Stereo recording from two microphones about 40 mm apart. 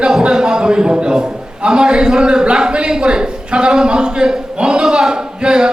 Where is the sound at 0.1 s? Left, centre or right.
Centre.